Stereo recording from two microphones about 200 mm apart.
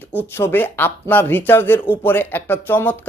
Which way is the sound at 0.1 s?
10° left (ahead or behind).